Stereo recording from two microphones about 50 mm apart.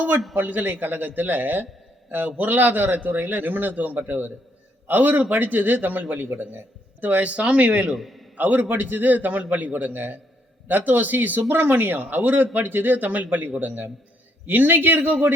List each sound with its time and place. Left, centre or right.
0.3 s a man's voice: right
7.3 s speech: right
7.9 s a man's voice: centre
8.4 s a man's voice: right